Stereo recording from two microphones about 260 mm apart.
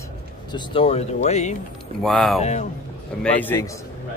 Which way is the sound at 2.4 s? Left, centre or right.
Left.